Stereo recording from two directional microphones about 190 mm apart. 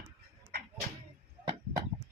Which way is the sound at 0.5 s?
55° right (ahead or behind).